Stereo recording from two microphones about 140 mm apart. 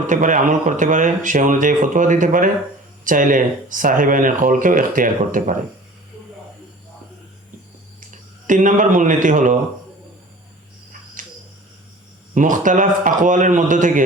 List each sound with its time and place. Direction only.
0.1 s speech: 65° right (ahead or behind)
8.4 s speech: 65° right (ahead or behind)
11.2 s a sound: 70° right (ahead or behind)
12.3 s speech: 70° right (ahead or behind)